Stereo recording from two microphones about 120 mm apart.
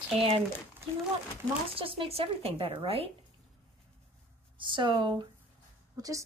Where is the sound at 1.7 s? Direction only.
50° right (ahead or behind).